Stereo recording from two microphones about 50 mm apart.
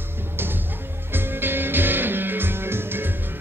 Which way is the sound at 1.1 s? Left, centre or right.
Right.